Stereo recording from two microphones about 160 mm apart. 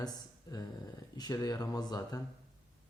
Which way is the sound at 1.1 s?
20° left (ahead or behind).